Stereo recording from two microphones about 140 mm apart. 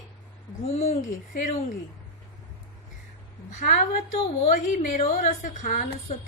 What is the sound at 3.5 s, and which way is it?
A woman's voice, 60° left (ahead or behind).